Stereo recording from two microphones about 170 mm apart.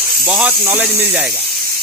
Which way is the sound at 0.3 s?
10° right (ahead or behind).